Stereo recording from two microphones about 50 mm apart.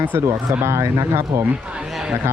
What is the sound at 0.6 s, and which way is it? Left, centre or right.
Speech, right.